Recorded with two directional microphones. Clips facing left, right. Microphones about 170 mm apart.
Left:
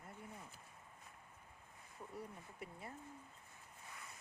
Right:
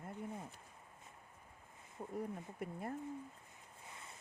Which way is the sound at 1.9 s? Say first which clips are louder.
Right 8 dB; 50° right (ahead or behind).